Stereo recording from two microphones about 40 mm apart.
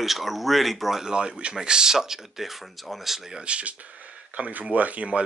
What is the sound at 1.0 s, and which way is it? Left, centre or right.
Speech, right.